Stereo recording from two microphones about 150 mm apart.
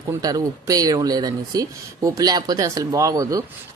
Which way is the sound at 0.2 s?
25° right (ahead or behind).